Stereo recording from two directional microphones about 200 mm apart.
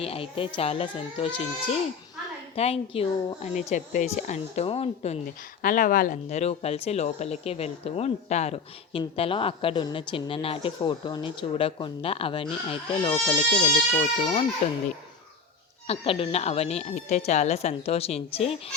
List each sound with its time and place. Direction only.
0.0 s speech: 30° left (ahead or behind)
2.6 s a woman's voice: 30° left (ahead or behind)
5.6 s speech: 40° left (ahead or behind); by 14.4 s 25° left (ahead or behind)
15.9 s a woman's voice: 30° left (ahead or behind)